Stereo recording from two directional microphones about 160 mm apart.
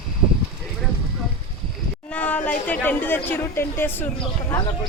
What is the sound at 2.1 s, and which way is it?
A woman's voice, 10° left (ahead or behind).